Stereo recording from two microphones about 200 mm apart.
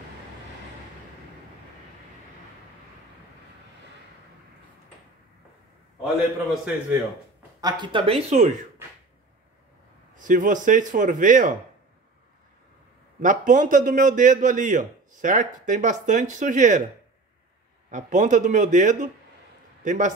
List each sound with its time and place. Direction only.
6.0 s a man's voice: 5° right (ahead or behind)
7.6 s speech: 20° right (ahead or behind)
10.1 s a man's voice: 40° right (ahead or behind)
13.2 s a man's voice: 40° right (ahead or behind)
17.9 s a man's voice: 40° right (ahead or behind)